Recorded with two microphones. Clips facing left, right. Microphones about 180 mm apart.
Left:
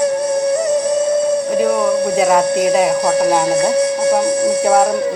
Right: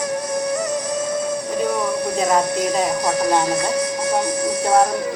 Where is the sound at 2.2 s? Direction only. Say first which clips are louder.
Left 4 dB; 65° left (ahead or behind).